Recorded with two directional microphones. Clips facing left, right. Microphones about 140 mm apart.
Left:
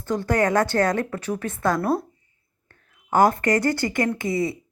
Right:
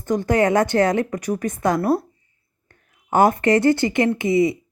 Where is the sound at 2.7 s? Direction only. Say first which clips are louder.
Right 1 dB; 20° right (ahead or behind).